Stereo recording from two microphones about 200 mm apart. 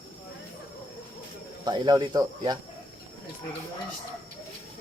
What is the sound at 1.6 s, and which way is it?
Speech, 20° right (ahead or behind).